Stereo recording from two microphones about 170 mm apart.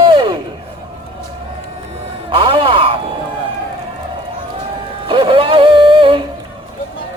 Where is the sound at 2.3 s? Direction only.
30° right (ahead or behind).